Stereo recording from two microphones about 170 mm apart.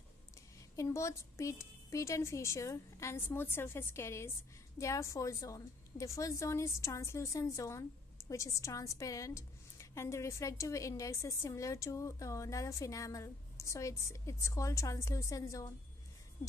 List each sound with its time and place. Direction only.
0.7 s a woman's voice: 20° left (ahead or behind)